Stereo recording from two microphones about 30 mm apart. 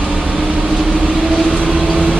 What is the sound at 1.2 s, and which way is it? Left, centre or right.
Vehicle, centre.